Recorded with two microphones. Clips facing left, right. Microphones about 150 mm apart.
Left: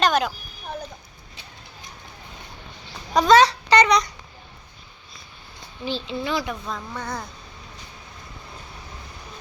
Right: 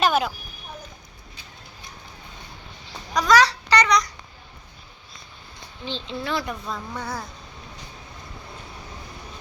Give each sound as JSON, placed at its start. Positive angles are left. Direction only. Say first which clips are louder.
{"t": 0.0, "sound": "a sound", "louder": "even", "side_deg": -5}
{"t": 3.1, "sound": "a child's voice", "louder": "left 3 dB", "side_deg": 25}
{"t": 5.8, "sound": "a woman's voice", "louder": "left 3 dB", "side_deg": 5}